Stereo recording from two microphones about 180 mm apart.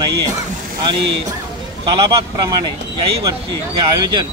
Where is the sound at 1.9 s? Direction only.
25° right (ahead or behind).